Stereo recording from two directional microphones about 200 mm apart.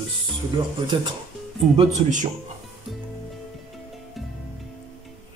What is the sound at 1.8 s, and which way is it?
Speech, 40° right (ahead or behind).